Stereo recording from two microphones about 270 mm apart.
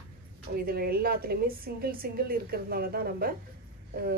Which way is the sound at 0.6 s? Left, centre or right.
Right.